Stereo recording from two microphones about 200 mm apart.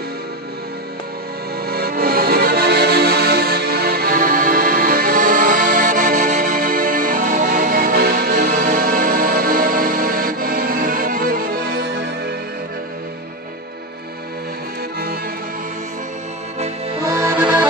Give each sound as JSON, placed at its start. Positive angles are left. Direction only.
{"t": 1.7, "sound": "accordion", "side_deg": -50}
{"t": 17.0, "sound": "accordion", "side_deg": -15}